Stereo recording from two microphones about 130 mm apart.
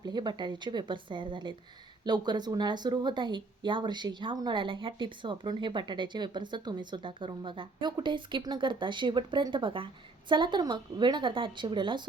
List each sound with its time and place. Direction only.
0.0 s speech: 35° right (ahead or behind)